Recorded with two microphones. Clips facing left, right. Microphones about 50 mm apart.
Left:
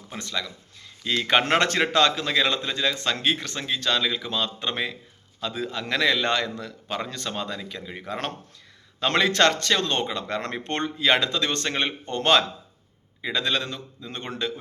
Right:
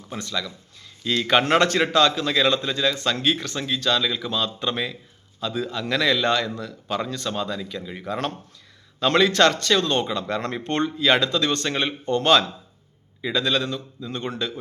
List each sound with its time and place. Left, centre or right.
0.2 s a man's voice: left
1.0 s speech: centre
1.3 s a man's voice: left
2.2 s a man's voice: left
10.8 s a man's voice: left